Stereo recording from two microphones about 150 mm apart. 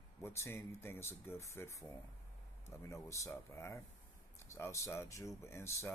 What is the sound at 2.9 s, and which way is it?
Speech, 20° left (ahead or behind).